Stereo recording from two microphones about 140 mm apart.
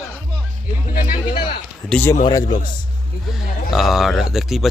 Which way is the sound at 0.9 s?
90° left.